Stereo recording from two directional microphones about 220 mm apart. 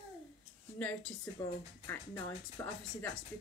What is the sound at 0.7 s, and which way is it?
Speech, 5° left (ahead or behind).